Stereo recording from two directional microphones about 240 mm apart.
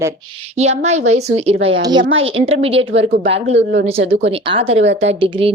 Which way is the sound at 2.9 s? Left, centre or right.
Right.